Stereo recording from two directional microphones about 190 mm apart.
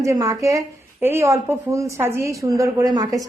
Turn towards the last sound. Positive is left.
turn(degrees=-20)  # may be behind; listen again after turning